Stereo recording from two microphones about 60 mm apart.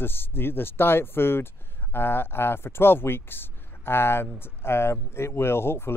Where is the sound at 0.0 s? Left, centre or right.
Left.